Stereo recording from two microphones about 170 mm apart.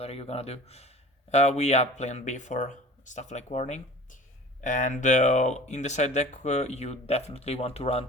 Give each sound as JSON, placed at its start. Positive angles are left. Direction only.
{"t": 0.0, "sound": "speech", "side_deg": 35}